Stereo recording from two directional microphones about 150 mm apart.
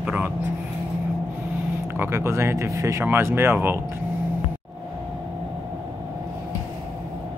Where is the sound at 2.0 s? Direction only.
15° right (ahead or behind).